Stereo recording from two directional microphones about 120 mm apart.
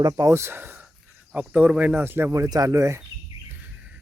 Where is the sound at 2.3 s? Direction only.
30° right (ahead or behind).